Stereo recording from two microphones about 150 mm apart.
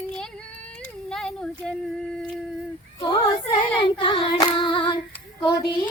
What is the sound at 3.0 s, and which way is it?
Singing, 35° left (ahead or behind).